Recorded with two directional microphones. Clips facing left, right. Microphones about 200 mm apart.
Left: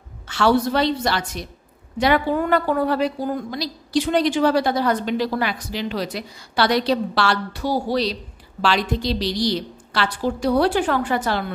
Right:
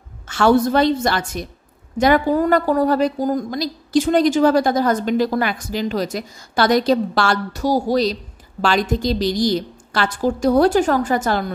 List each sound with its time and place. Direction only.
0.3 s a woman's voice: 50° right (ahead or behind)